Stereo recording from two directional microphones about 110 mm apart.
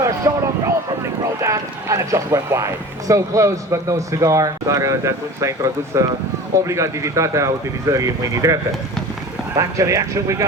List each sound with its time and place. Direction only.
0.0 s speech: 30° right (ahead or behind)
9.6 s speech: 30° right (ahead or behind)